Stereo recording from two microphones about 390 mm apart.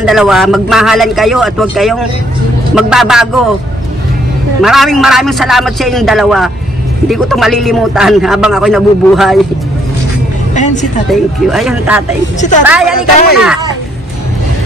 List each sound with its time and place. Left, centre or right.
0.0 s a man's voice: centre
4.6 s a man's voice: centre
10.5 s speech: centre
11.1 s a man's voice: centre